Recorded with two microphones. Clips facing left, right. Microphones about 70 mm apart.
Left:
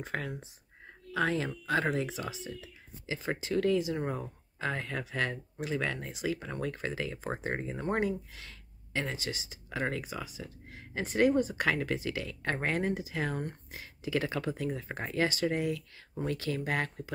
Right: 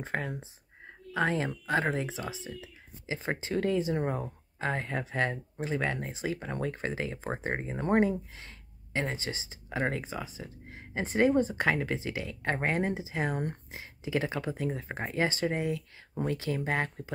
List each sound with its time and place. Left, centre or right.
0.0 s speech: right